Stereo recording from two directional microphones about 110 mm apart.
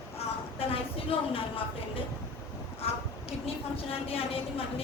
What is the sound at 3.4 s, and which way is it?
A woman's voice, 60° left (ahead or behind).